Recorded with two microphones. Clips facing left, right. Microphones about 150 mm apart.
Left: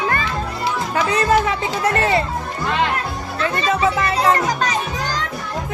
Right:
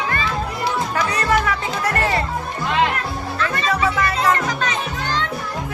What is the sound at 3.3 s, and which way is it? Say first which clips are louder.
Music: left 2 dB; 30° left (ahead or behind).